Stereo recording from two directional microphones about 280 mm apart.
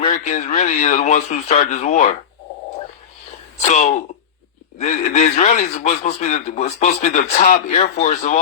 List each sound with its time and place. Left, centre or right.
0.0 s a man's voice: left
3.6 s a man's voice: left